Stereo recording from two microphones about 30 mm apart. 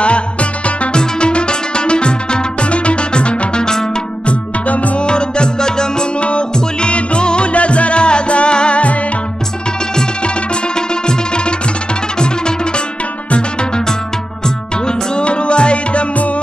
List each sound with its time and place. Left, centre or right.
0.0 s music: left
0.9 s music: left
4.3 s music: left
5.0 s music: left
6.2 s music: left
12.2 s music: left
14.9 s music: left